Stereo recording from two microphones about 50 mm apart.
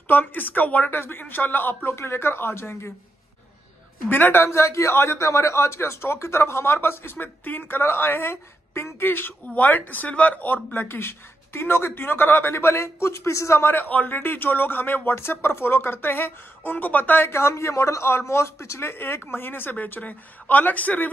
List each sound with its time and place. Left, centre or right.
0.1 s speech: left
0.9 s speech: left
4.1 s speech: left
4.5 s speech: left
13.7 s speech: left
15.0 s speech: left
17.3 s speech: left